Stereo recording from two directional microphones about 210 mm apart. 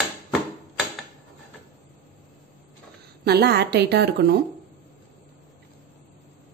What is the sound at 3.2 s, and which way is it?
A woman's voice, 50° right (ahead or behind).